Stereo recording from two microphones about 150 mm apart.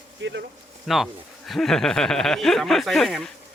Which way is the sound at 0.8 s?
Centre (ahead or behind).